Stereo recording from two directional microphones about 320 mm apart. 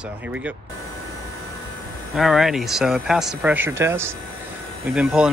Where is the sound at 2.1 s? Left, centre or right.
Centre.